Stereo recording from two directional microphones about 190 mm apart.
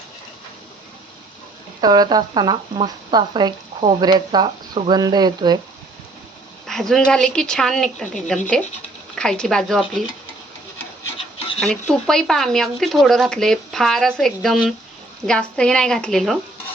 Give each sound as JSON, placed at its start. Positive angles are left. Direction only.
{"t": 1.8, "sound": "speech", "side_deg": -20}
{"t": 6.7, "sound": "speech", "side_deg": 0}
{"t": 11.2, "sound": "a sound", "side_deg": 30}
{"t": 11.6, "sound": "speech", "side_deg": 5}